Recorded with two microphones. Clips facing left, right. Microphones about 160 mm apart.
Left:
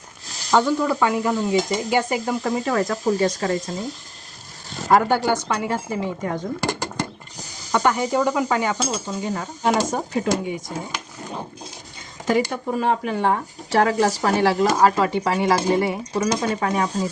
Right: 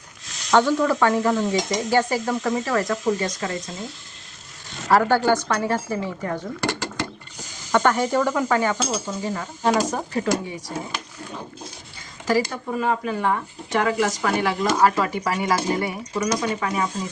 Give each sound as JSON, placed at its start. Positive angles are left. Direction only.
{"t": 0.3, "sound": "a sound", "side_deg": 35}
{"t": 0.5, "sound": "speech", "side_deg": 15}
{"t": 2.4, "sound": "speech", "side_deg": 35}
{"t": 4.9, "sound": "speech", "side_deg": 15}
{"t": 12.3, "sound": "speech", "side_deg": 25}